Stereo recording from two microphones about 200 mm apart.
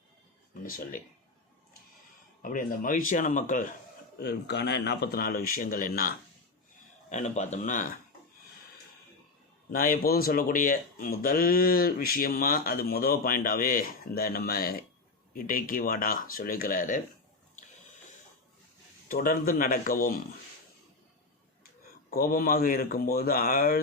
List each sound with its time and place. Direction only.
0.5 s speech: 45° left (ahead or behind)
2.4 s speech: 45° left (ahead or behind)
4.2 s speech: 55° left (ahead or behind)
7.1 s speech: 35° left (ahead or behind)
9.7 s speech: 45° left (ahead or behind)
19.0 s speech: 45° left (ahead or behind)
22.1 s speech: 45° left (ahead or behind)